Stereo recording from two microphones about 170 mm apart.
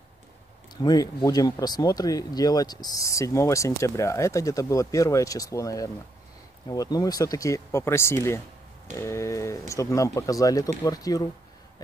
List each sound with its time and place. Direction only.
0.7 s speech: 25° left (ahead or behind)